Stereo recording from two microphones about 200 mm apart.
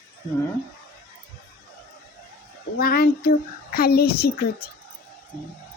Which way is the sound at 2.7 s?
50° left (ahead or behind).